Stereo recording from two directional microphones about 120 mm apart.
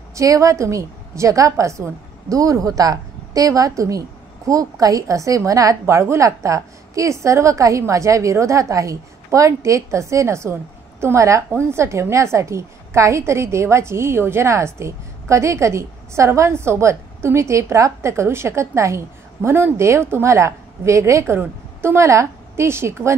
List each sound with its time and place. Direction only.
0.1 s a woman's voice: 25° right (ahead or behind)